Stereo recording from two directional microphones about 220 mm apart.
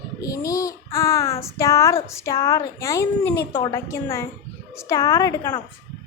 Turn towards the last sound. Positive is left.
turn(degrees=15)  # may be behind; listen again after turning